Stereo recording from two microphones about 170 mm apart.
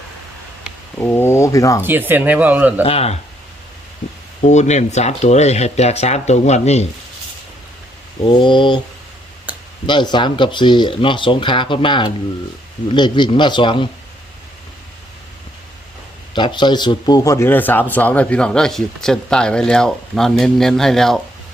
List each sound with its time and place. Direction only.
0.9 s speech: 10° left (ahead or behind)
1.8 s speech: 10° right (ahead or behind)
2.8 s speech: 35° left (ahead or behind)
4.4 s speech: 45° left (ahead or behind)
8.3 s speech: 30° left (ahead or behind)
9.5 s a sound: 10° right (ahead or behind)
9.8 s speech: 25° left (ahead or behind)
16.3 s a man's voice: 25° left (ahead or behind); by 21.2 s centre (ahead or behind)